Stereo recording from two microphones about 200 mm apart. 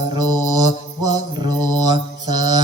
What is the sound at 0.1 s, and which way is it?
Mantra, 20° right (ahead or behind).